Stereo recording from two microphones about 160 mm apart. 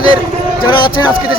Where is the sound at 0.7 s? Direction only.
30° left (ahead or behind).